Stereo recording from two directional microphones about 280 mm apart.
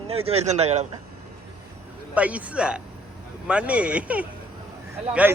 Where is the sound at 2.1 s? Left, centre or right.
Centre.